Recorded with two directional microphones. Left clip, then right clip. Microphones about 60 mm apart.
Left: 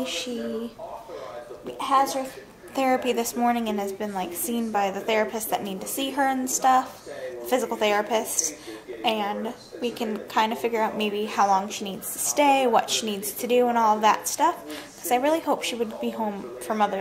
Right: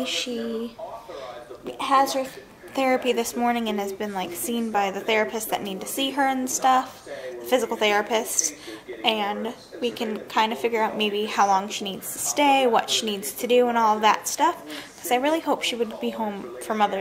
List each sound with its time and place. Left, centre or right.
0.0 s speech: centre
1.8 s speech: centre
2.7 s a woman's voice: centre